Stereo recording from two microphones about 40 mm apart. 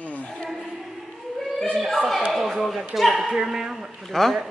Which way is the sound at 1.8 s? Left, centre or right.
Centre.